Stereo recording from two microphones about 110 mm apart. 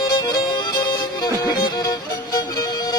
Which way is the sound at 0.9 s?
40° left (ahead or behind).